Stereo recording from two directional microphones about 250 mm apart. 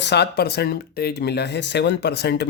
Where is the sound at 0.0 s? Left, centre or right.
Left.